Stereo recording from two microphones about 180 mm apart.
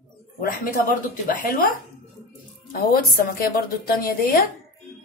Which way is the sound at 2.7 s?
55° left (ahead or behind).